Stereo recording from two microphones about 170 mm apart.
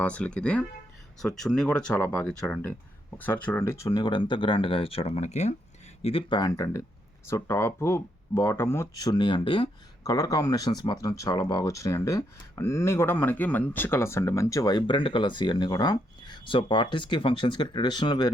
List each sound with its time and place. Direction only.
0.0 s speech: 5° left (ahead or behind); by 9.6 s 30° left (ahead or behind)
10.0 s speech: 20° left (ahead or behind)